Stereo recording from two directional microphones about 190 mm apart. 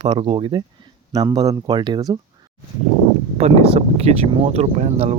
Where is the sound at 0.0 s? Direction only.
25° right (ahead or behind).